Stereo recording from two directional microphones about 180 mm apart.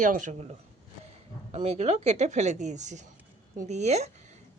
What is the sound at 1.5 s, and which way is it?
A woman's voice, 35° right (ahead or behind).